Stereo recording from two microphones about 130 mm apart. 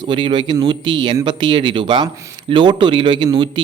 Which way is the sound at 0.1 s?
40° right (ahead or behind).